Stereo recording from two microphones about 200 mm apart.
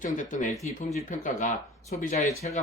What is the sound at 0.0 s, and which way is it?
Speech, 40° left (ahead or behind).